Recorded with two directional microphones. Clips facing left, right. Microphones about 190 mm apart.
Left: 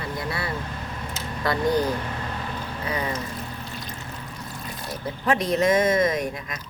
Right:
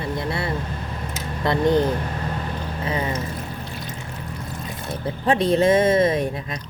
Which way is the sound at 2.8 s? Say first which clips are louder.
Right 3 dB; 25° right (ahead or behind).